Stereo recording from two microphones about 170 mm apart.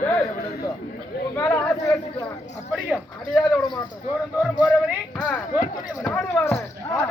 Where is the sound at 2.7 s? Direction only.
Centre (ahead or behind).